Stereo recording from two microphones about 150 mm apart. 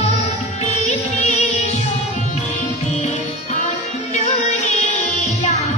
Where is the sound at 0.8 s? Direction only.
50° left (ahead or behind).